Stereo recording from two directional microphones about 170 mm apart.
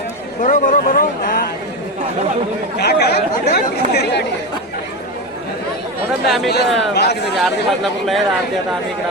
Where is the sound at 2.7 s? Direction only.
70° left (ahead or behind).